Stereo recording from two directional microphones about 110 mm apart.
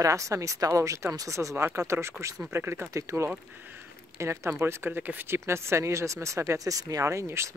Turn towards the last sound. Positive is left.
turn(degrees=-25)  # may be behind; listen again after turning